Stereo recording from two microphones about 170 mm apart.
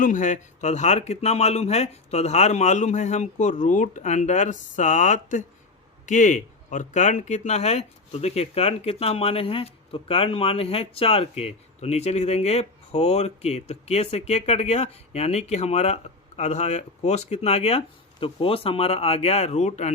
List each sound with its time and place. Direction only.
0.0 s speech: 50° left (ahead or behind)